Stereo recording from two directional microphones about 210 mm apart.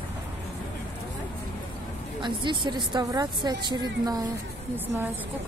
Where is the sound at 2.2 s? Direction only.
20° right (ahead or behind).